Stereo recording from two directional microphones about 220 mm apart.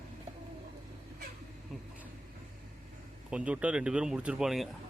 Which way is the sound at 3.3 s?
5° right (ahead or behind).